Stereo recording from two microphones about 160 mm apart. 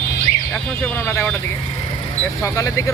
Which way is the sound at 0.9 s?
15° left (ahead or behind).